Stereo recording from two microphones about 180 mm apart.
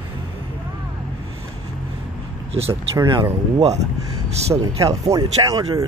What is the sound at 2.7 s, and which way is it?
Speech, 20° right (ahead or behind).